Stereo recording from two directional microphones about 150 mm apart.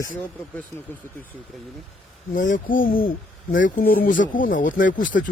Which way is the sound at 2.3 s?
60° left (ahead or behind).